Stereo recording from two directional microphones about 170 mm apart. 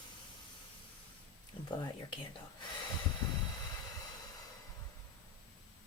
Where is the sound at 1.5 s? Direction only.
30° left (ahead or behind).